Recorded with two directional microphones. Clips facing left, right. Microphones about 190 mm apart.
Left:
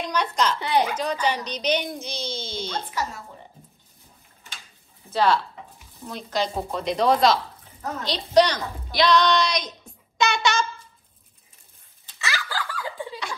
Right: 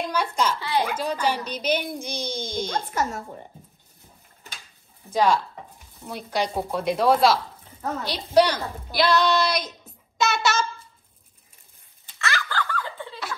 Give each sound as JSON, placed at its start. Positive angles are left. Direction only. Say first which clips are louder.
{"t": 0.0, "sound": "a child's voice", "louder": "even", "side_deg": -5}
{"t": 0.6, "sound": "a child's voice", "louder": "left 3 dB", "side_deg": 20}
{"t": 0.9, "sound": "speech", "louder": "even", "side_deg": -10}
{"t": 2.7, "sound": "a woman's voice", "louder": "right 3 dB", "side_deg": -50}
{"t": 5.1, "sound": "a woman's voice", "louder": "even", "side_deg": -10}
{"t": 12.3, "sound": "snicker", "louder": "right 2 dB", "side_deg": 5}